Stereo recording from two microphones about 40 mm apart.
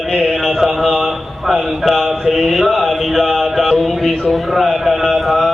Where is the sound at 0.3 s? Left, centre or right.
Centre.